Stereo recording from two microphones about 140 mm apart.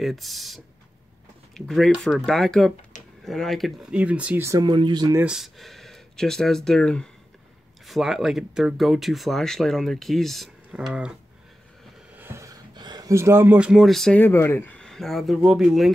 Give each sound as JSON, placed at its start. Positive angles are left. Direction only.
{"t": 0.0, "sound": "speech", "side_deg": 0}
{"t": 4.5, "sound": "speech", "side_deg": -30}
{"t": 5.2, "sound": "speech", "side_deg": -5}
{"t": 12.2, "sound": "a sound", "side_deg": -20}
{"t": 14.2, "sound": "speech", "side_deg": 15}
{"t": 14.8, "sound": "speech", "side_deg": 5}